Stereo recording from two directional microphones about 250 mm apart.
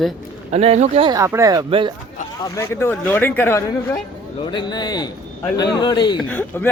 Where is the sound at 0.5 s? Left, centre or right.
Right.